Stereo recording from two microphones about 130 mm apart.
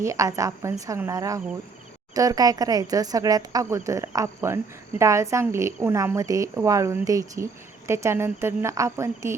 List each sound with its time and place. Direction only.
0.0 s speech: 25° right (ahead or behind)